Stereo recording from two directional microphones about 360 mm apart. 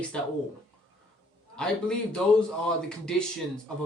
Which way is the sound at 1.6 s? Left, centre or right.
Centre.